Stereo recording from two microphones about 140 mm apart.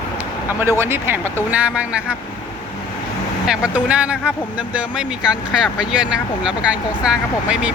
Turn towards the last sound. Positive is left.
turn(degrees=-10)  # may be behind; listen again after turning